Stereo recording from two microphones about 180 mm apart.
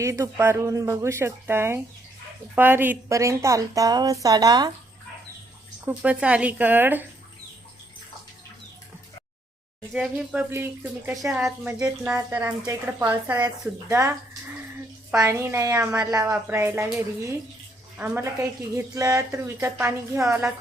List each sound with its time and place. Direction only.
0.0 s a woman's voice: 15° right (ahead or behind)
5.8 s speech: 5° right (ahead or behind)
9.9 s speech: 5° right (ahead or behind)
11.2 s a woman's voice: centre (ahead or behind)
15.2 s speech: 15° right (ahead or behind)
17.9 s speech: 10° right (ahead or behind)